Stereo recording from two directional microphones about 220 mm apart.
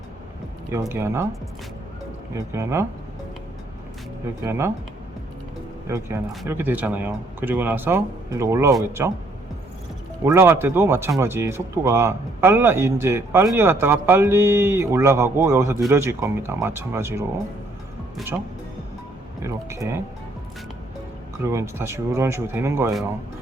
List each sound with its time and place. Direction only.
0.7 s speech: 10° right (ahead or behind)
2.3 s speech: 10° right (ahead or behind)
4.4 s speech: 10° right (ahead or behind)
5.9 s speech: 10° right (ahead or behind)
10.2 s speech: 10° right (ahead or behind)
18.2 s speech: centre (ahead or behind)
19.4 s speech: 15° right (ahead or behind)
21.5 s speech: 10° right (ahead or behind)